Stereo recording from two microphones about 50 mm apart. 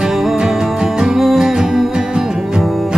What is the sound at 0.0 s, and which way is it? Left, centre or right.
Music, centre.